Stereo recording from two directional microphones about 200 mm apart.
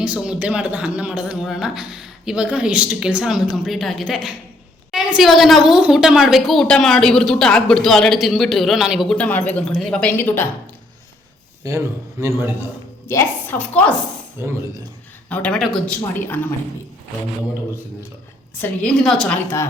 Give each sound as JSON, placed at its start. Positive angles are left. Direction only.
{"t": 0.0, "sound": "a woman's voice", "side_deg": -5}
{"t": 11.6, "sound": "speech", "side_deg": -15}
{"t": 13.1, "sound": "speech", "side_deg": 10}
{"t": 14.4, "sound": "speech", "side_deg": -10}
{"t": 15.3, "sound": "speech", "side_deg": 5}
{"t": 18.5, "sound": "a woman's voice", "side_deg": 5}